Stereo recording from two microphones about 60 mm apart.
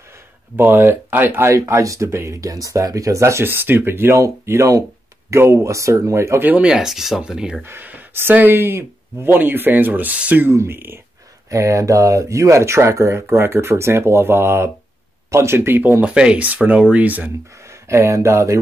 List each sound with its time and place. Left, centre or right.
0.6 s speech: right
1.8 s speech: right
3.4 s speech: right
4.2 s speech: right
6.7 s speech: centre
7.6 s speech: right
10.4 s speech: right
11.5 s speech: right
16.0 s speech: centre
17.6 s speech: right